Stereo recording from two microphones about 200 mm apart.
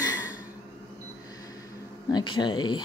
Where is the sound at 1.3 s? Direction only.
15° left (ahead or behind).